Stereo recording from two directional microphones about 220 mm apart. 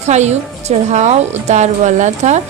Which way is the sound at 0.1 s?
30° right (ahead or behind).